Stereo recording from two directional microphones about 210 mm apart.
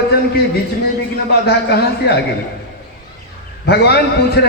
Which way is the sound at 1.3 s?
50° left (ahead or behind).